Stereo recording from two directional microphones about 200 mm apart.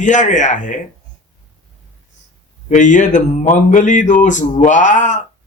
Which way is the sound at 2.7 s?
40° left (ahead or behind).